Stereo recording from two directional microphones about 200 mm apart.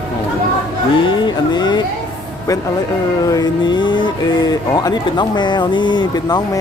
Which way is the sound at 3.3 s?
20° left (ahead or behind).